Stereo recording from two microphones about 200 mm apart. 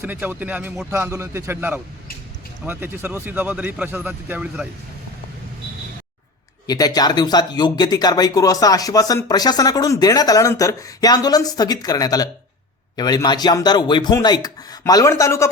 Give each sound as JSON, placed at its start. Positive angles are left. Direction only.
{"t": 0.0, "sound": "speech", "side_deg": -10}
{"t": 6.7, "sound": "speech", "side_deg": 20}